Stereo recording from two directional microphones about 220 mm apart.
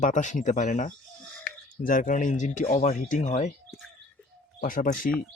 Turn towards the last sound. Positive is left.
turn(degrees=40)  # may be behind; listen again after turning